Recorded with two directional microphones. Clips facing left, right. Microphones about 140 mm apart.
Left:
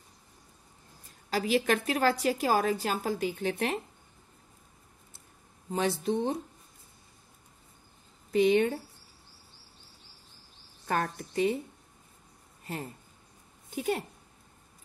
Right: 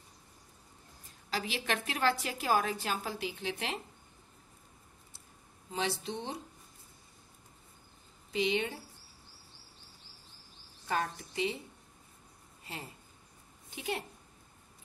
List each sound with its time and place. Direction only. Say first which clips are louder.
1.3 s a woman's voice: left 8 dB; 40° left (ahead or behind)
5.7 s speech: left 7 dB; 45° left (ahead or behind)
8.3 s speech: left 8 dB; 50° left (ahead or behind)
10.9 s speech: left 3 dB; 50° left (ahead or behind)
12.6 s a woman's voice: left 7 dB; 50° left (ahead or behind)